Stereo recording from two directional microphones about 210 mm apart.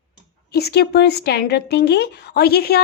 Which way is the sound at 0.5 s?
50° left (ahead or behind).